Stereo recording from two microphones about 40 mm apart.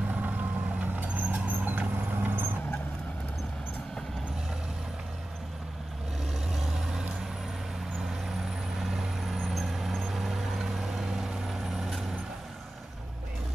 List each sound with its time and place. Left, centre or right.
0.1 s vehicle: right
2.1 s vehicle: right
6.5 s vehicle: centre
8.1 s vehicle: centre